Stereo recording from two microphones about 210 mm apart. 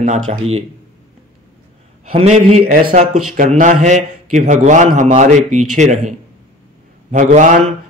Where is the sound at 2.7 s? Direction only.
45° right (ahead or behind).